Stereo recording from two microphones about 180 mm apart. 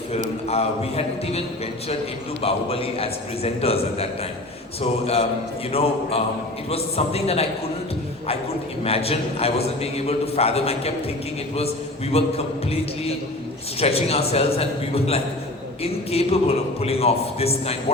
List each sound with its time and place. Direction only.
0.4 s a man's voice: 35° left (ahead or behind)
8.8 s a man's voice: 35° left (ahead or behind)
12.1 s a man's voice: 35° left (ahead or behind)
13.7 s a man's voice: 35° left (ahead or behind)